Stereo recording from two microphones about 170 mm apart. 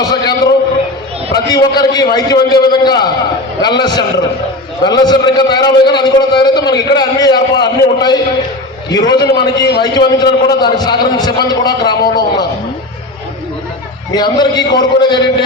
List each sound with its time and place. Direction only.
0.0 s a sound: 25° left (ahead or behind)
1.5 s a man's voice: 25° left (ahead or behind)
14.1 s a man's voice: 25° left (ahead or behind)